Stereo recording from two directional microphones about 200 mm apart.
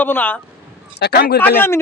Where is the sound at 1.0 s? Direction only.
55° left (ahead or behind).